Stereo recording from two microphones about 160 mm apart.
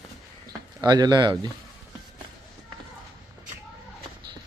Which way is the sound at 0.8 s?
25° right (ahead or behind).